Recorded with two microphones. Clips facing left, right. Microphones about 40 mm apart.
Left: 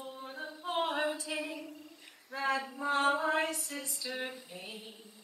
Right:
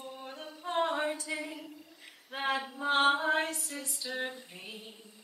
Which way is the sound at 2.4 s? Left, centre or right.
Right.